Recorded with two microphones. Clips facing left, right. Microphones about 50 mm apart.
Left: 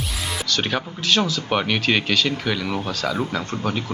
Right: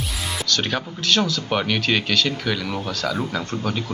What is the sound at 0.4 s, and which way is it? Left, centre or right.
Speech, centre.